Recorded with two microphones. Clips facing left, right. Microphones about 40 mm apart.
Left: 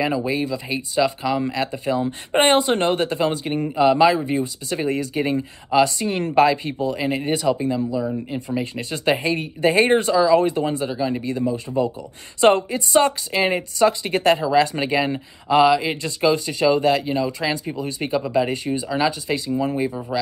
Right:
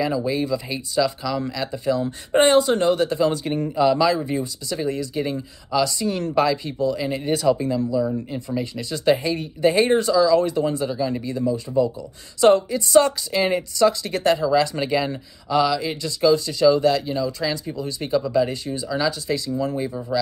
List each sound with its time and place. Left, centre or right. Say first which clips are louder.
0.0 s speech: left 1 dB; left
0.3 s speech: even; centre
0.7 s speech: left 4 dB; left
4.2 s speech: left 2 dB; centre
4.6 s speech: left 2 dB; left
7.3 s speech: right 4 dB; centre
15.4 s speech: left 4 dB; left; by 20.1 s centre